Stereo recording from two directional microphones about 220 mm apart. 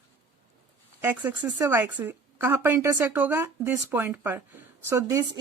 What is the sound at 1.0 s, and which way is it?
A woman's voice, 10° right (ahead or behind).